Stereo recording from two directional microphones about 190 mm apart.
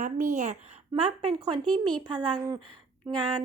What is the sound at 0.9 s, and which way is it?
A woman's voice, 25° right (ahead or behind).